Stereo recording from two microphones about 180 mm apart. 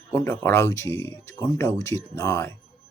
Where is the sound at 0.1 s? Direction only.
15° left (ahead or behind).